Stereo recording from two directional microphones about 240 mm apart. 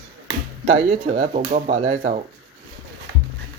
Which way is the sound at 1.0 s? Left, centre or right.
Right.